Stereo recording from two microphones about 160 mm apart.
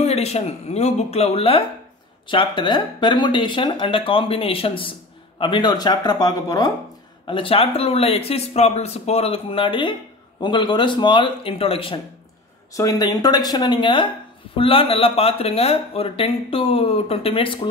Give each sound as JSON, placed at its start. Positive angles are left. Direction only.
{"t": 0.0, "sound": "speech", "side_deg": 40}
{"t": 12.7, "sound": "speech", "side_deg": 25}